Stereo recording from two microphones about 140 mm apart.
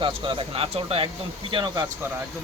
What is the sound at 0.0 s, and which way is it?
Speech, 40° right (ahead or behind).